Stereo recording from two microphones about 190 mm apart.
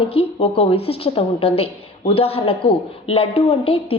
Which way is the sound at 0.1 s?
30° left (ahead or behind).